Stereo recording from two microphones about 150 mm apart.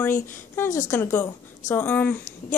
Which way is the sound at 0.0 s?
15° left (ahead or behind).